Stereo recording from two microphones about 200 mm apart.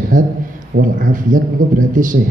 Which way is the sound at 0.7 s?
40° right (ahead or behind).